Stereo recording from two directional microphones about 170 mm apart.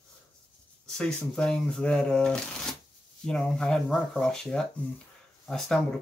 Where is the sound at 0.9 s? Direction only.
5° left (ahead or behind).